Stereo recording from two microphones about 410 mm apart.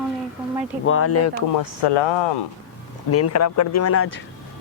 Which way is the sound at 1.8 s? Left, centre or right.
Left.